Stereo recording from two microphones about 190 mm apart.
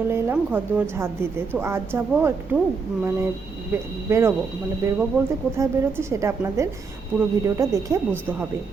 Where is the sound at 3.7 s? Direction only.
15° right (ahead or behind).